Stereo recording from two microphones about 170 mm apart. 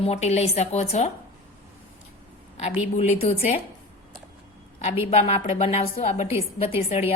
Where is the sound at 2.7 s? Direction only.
40° left (ahead or behind).